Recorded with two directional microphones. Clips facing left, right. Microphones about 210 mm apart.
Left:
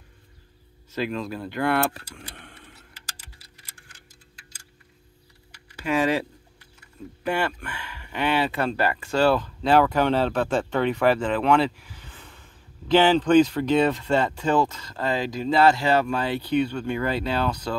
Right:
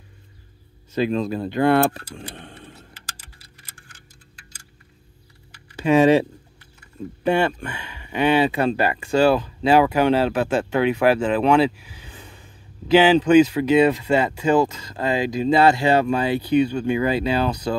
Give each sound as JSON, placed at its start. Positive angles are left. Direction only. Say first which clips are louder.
{"t": 0.9, "sound": "speech", "louder": "right 7 dB", "side_deg": -20}
{"t": 2.3, "sound": "vehicle", "louder": "right 7 dB", "side_deg": -25}
{"t": 2.7, "sound": "clock", "louder": "right 5 dB", "side_deg": -55}
{"t": 5.8, "sound": "speech", "louder": "right 8 dB", "side_deg": -25}
{"t": 7.2, "sound": "speech", "louder": "right 6 dB", "side_deg": -25}